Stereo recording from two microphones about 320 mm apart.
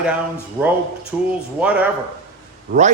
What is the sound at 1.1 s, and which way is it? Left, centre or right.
Speech, centre.